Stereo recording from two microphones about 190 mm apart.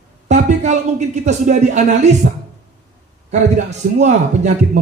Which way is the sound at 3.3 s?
35° right (ahead or behind).